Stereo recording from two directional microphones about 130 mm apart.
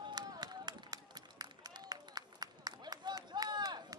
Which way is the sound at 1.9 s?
30° right (ahead or behind).